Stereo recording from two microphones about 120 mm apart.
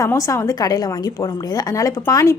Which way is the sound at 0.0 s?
25° left (ahead or behind).